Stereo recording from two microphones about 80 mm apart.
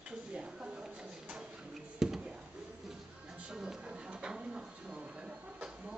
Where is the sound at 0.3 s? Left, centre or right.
Centre.